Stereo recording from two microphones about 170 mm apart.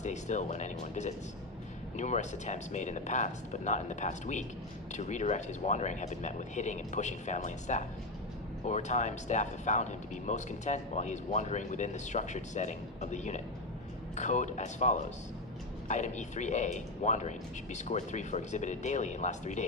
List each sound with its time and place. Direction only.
0.0 s speech: 45° left (ahead or behind)